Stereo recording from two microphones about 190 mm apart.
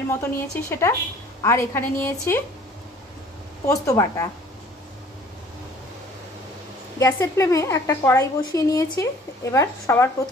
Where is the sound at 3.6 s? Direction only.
15° left (ahead or behind).